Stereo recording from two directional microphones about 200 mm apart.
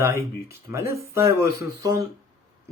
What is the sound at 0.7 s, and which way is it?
Speech, 15° right (ahead or behind).